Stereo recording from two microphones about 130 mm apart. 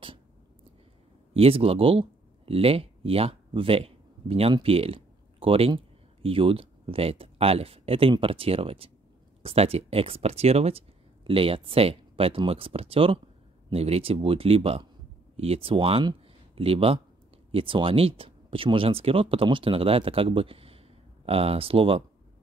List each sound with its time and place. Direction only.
1.3 s speech: 50° right (ahead or behind)